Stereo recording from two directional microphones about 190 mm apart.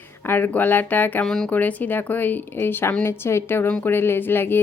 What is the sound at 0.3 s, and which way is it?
Speech, 10° left (ahead or behind).